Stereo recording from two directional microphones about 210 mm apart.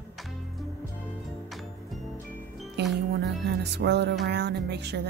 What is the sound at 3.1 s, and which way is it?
Music, 50° right (ahead or behind).